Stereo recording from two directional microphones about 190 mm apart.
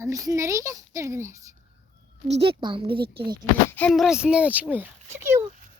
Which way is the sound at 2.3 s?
30° right (ahead or behind).